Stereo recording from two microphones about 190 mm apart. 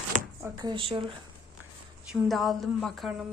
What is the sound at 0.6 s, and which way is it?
Speech, 25° right (ahead or behind).